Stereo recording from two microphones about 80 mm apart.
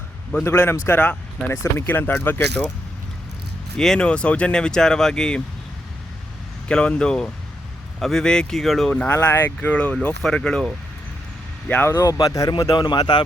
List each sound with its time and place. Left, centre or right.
0.4 s speech: left
3.8 s speech: centre
6.7 s speech: centre
8.9 s speech: centre
9.1 s speech: left
9.6 s speech: centre
11.7 s speech: left
12.0 s speech: left
12.7 s speech: left